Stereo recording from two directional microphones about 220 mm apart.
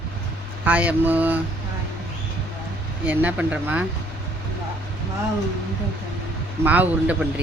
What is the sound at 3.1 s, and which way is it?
Speech, 5° right (ahead or behind).